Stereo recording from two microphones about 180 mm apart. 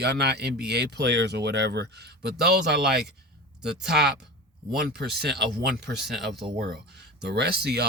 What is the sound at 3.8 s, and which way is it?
Speech, 65° right (ahead or behind).